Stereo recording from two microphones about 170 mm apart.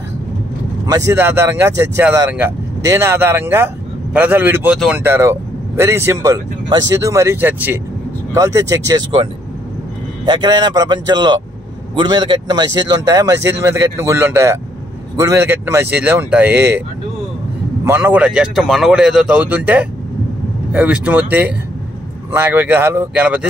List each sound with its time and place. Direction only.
0.8 s speech: 20° right (ahead or behind); by 5.0 s 5° right (ahead or behind)
5.0 s speech: 15° right (ahead or behind)
17.8 s speech: 15° right (ahead or behind)